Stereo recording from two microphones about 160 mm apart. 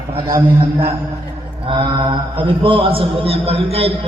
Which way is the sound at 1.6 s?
30° right (ahead or behind).